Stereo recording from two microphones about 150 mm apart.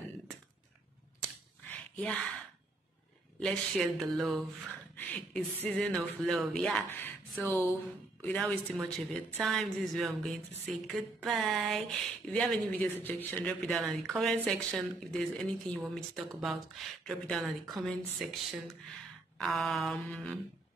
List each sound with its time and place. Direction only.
1.7 s a sound: 10° left (ahead or behind)
3.3 s speech: 5° left (ahead or behind)
4.9 s speech: 10° left (ahead or behind)
6.9 s speech: 15° left (ahead or behind)